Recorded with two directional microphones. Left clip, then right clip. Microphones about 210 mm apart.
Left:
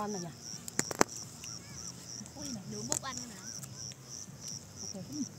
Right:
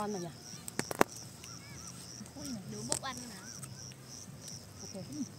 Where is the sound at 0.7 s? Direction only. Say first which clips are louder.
Even; 10° left (ahead or behind).